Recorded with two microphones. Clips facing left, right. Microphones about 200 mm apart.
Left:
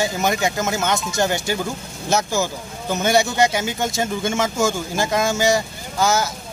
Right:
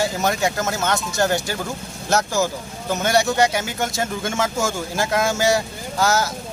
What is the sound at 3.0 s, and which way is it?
Speech, centre (ahead or behind).